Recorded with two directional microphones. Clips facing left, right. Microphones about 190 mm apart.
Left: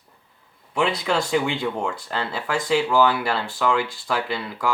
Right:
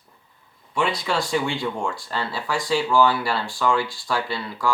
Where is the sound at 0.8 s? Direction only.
20° left (ahead or behind).